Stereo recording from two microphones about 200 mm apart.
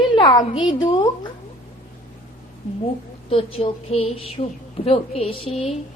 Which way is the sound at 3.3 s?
30° left (ahead or behind).